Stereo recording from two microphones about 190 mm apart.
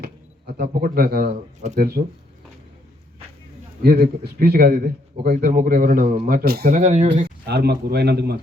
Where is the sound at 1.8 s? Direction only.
50° right (ahead or behind).